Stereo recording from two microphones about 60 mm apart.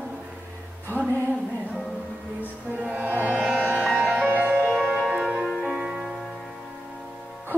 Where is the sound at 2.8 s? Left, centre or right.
Right.